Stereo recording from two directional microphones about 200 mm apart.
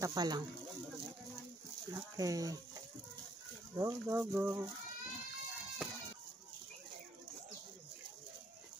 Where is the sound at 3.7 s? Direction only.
15° right (ahead or behind).